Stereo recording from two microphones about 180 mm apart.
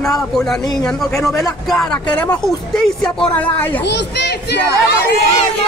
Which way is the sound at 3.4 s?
10° left (ahead or behind).